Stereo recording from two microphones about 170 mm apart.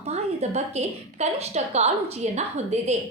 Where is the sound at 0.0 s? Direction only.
40° right (ahead or behind).